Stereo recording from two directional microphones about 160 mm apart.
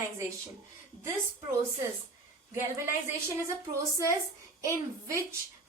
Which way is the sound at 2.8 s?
15° right (ahead or behind).